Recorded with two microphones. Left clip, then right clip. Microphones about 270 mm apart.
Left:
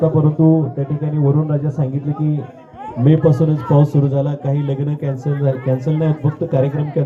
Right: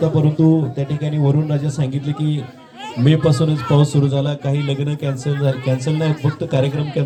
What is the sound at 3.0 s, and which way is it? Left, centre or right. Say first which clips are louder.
A man's voice: left 2 dB; right.